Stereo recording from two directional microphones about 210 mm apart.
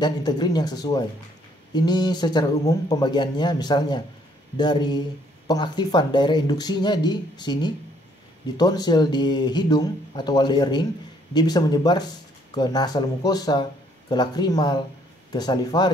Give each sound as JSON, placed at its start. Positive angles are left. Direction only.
{"t": 0.0, "sound": "a man's voice", "side_deg": 20}